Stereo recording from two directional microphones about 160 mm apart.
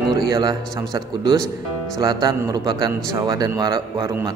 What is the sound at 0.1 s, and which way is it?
Speech, 25° right (ahead or behind).